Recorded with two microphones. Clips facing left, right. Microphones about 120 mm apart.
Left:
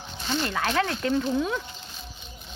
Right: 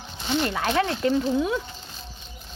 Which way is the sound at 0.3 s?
20° right (ahead or behind).